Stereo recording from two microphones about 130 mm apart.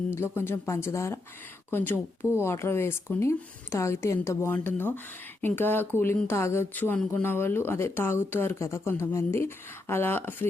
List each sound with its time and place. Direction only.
0.1 s speech: 20° left (ahead or behind)